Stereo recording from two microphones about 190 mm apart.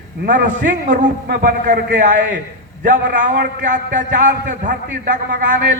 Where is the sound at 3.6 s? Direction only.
45° right (ahead or behind).